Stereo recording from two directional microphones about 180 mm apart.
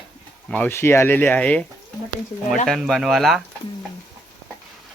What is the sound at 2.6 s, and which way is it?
Speech, centre (ahead or behind).